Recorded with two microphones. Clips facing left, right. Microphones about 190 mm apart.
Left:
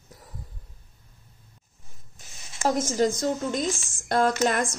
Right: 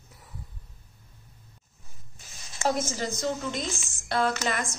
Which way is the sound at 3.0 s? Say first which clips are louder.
Left 6 dB; 50° left (ahead or behind).